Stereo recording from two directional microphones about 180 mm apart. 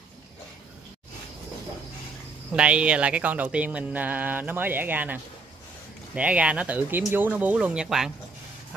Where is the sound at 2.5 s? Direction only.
5° right (ahead or behind).